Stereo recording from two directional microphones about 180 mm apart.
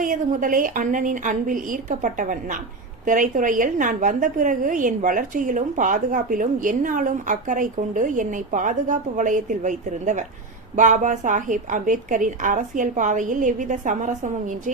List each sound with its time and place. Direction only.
0.0 s a woman's voice: 50° right (ahead or behind)